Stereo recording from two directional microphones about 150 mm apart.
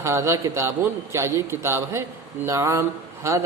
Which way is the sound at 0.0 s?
15° right (ahead or behind).